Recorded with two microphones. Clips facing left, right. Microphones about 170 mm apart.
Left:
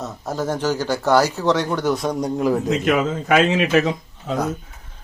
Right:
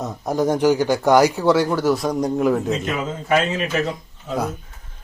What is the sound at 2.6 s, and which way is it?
Speech, 80° left.